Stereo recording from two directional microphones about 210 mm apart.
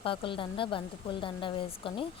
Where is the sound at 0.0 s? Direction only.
25° left (ahead or behind).